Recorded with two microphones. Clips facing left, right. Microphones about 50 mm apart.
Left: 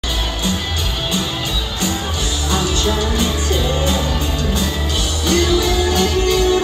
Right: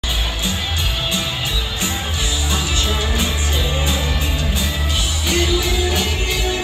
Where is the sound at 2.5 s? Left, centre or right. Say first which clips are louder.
Left 6 dB; right.